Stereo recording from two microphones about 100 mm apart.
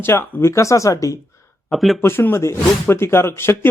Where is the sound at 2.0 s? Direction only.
25° left (ahead or behind).